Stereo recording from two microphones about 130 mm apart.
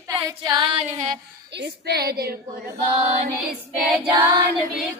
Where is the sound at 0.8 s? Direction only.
65° right (ahead or behind).